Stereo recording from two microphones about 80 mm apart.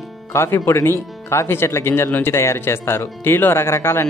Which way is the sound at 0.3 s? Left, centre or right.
Left.